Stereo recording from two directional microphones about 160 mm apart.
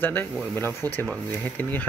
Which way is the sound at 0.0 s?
15° left (ahead or behind).